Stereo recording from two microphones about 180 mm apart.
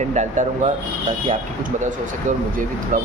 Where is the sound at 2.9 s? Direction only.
50° right (ahead or behind).